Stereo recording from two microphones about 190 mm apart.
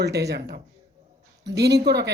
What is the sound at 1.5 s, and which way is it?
Speech, 65° right (ahead or behind).